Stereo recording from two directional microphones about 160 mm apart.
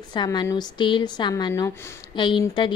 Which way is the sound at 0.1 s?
25° left (ahead or behind).